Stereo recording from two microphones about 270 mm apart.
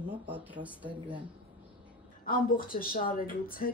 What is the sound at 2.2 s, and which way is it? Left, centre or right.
A woman's voice, left.